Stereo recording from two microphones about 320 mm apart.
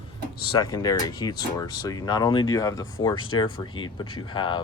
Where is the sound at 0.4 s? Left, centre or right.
Centre.